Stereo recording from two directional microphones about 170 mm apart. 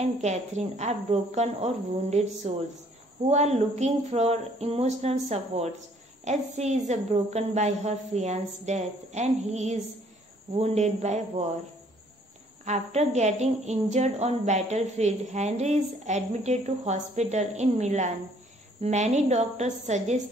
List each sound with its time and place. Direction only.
0.0 s a woman's voice: 40° right (ahead or behind)
12.6 s a woman's voice: 40° right (ahead or behind)